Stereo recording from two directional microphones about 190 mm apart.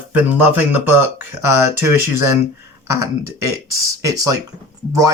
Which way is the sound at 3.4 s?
15° right (ahead or behind).